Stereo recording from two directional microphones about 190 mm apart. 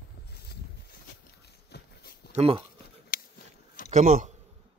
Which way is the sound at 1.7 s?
60° left (ahead or behind).